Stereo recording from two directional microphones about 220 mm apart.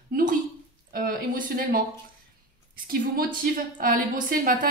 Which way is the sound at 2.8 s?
40° right (ahead or behind).